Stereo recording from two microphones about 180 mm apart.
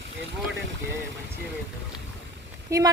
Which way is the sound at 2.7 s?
15° right (ahead or behind).